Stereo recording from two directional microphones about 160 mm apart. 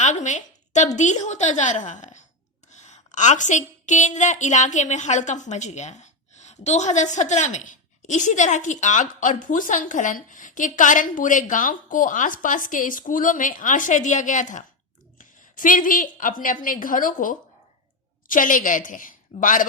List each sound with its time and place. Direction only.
0.0 s a woman's voice: 50° left (ahead or behind)